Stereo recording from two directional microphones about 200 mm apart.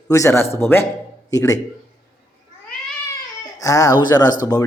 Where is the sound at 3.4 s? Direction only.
15° left (ahead or behind).